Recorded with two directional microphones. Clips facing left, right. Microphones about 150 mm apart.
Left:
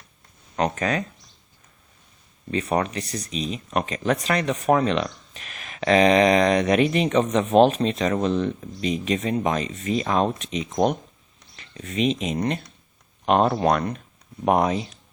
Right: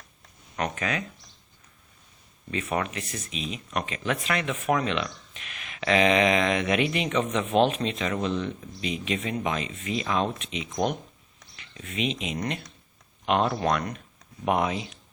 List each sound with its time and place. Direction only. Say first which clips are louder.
0.5 s speech: left 6 dB; 35° left (ahead or behind)
2.5 s speech: left 5 dB; 35° left (ahead or behind)